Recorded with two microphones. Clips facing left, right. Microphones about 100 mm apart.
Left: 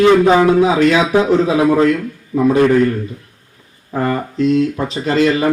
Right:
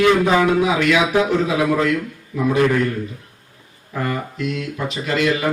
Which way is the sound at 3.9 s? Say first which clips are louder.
Left 6 dB; 35° left (ahead or behind).